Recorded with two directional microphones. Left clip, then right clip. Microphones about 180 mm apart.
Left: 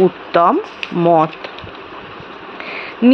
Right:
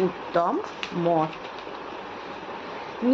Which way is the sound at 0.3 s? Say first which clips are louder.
Left 11 dB; 35° left (ahead or behind).